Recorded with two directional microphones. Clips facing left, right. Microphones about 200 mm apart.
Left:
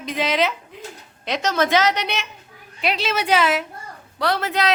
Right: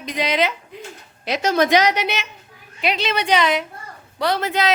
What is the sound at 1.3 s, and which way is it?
Speech, 10° right (ahead or behind).